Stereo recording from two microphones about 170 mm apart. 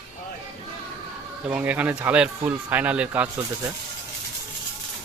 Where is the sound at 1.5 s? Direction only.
10° right (ahead or behind).